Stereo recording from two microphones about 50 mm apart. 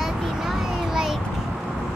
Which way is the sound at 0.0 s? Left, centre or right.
Centre.